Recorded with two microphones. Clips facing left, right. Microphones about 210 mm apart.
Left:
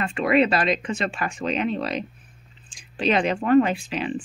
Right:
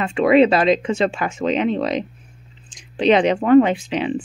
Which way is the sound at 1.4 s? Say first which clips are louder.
Right 6 dB; 90° right.